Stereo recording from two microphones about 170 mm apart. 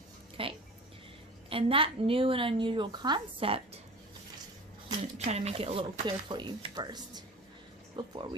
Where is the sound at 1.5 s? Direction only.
30° right (ahead or behind).